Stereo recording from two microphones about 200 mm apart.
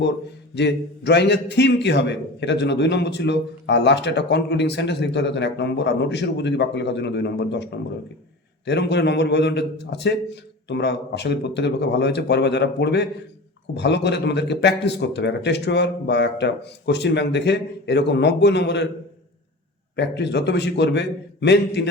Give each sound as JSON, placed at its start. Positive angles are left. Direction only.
{"t": 0.5, "sound": "a man's voice", "side_deg": 60}
{"t": 20.0, "sound": "a man's voice", "side_deg": 60}